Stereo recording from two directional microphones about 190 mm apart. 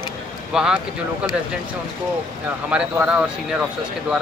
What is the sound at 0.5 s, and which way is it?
Speech, 5° right (ahead or behind).